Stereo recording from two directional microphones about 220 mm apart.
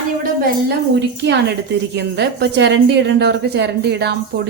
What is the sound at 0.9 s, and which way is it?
A woman's voice, 50° right (ahead or behind).